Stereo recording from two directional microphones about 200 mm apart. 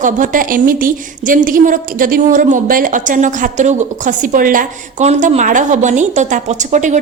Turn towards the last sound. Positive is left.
turn(degrees=-35)  # may be behind; listen again after turning